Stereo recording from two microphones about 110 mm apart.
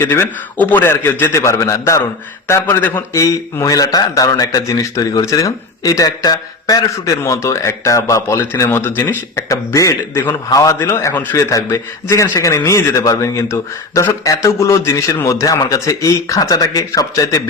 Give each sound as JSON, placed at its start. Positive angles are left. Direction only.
{"t": 0.1, "sound": "a man's voice", "side_deg": 15}